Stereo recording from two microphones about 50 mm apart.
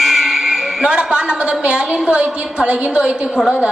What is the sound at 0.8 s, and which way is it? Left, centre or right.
A woman's voice, centre.